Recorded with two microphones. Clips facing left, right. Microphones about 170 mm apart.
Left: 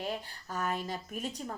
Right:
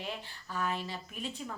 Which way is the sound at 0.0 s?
45° left (ahead or behind).